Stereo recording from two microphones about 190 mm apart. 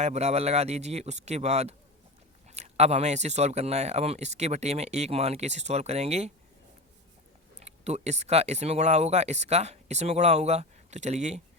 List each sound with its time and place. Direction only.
0.0 s speech: 35° right (ahead or behind)
7.6 s speech: 35° right (ahead or behind)